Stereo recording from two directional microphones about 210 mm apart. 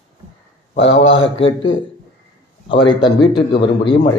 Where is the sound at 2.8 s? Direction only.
20° left (ahead or behind).